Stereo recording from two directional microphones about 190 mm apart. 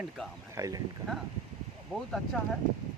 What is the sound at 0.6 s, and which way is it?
Speech, 15° right (ahead or behind).